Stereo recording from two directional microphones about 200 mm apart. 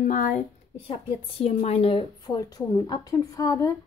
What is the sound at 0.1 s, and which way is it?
Speech, 40° left (ahead or behind).